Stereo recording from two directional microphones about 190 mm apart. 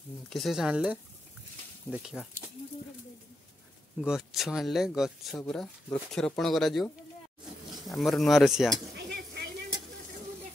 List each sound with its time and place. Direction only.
0.3 s speech: centre (ahead or behind)
4.0 s speech: 5° right (ahead or behind)
8.9 s dishes: 65° right (ahead or behind)